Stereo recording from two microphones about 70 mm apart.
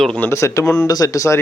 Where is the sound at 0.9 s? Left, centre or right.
Left.